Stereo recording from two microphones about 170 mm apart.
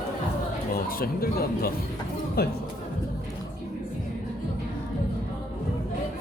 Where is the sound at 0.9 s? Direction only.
60° left (ahead or behind).